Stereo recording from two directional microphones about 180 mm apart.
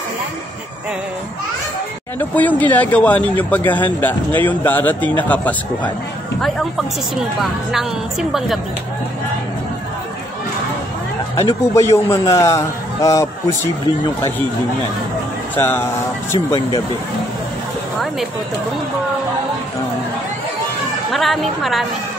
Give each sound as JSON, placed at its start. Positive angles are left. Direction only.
{"t": 2.1, "sound": "speech", "side_deg": 10}
{"t": 7.7, "sound": "a woman's voice", "side_deg": 0}
{"t": 11.3, "sound": "speech", "side_deg": 15}
{"t": 15.5, "sound": "speech", "side_deg": 10}
{"t": 21.1, "sound": "a woman's voice", "side_deg": 0}